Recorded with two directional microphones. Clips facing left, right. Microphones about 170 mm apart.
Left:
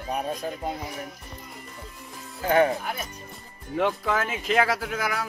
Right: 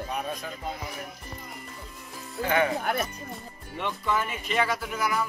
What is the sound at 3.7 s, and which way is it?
Speech, 90° left.